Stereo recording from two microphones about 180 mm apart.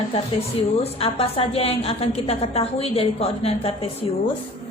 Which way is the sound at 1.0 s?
30° left (ahead or behind).